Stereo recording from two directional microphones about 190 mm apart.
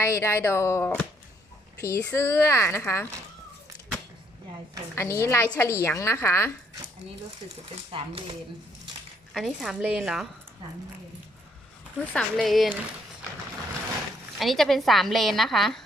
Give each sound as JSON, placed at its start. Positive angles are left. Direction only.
{"t": 0.0, "sound": "a woman's voice", "side_deg": 15}
{"t": 4.9, "sound": "a woman's voice", "side_deg": 15}
{"t": 7.9, "sound": "speech", "side_deg": -30}
{"t": 9.3, "sound": "a woman's voice", "side_deg": 0}
{"t": 12.0, "sound": "a woman's voice", "side_deg": 5}
{"t": 14.3, "sound": "a woman's voice", "side_deg": 0}